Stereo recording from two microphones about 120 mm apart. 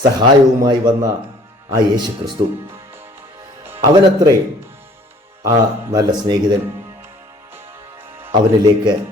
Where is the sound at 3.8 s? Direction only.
35° right (ahead or behind).